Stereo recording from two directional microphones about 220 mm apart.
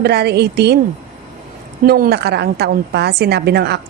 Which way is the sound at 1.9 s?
45° right (ahead or behind).